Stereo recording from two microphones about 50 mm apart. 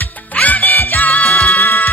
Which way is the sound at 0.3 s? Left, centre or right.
Left.